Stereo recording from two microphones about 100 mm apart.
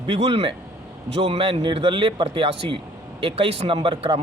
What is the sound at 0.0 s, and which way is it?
Speech, 65° right (ahead or behind).